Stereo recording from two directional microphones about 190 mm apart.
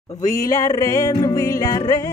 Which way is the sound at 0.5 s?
15° left (ahead or behind).